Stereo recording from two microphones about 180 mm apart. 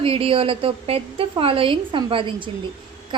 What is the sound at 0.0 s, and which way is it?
A woman's voice, 30° right (ahead or behind).